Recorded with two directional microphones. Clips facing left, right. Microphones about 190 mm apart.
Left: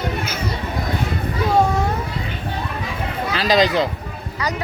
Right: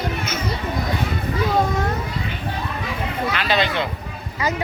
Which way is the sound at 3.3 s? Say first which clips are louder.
Left 7 dB; 35° left (ahead or behind).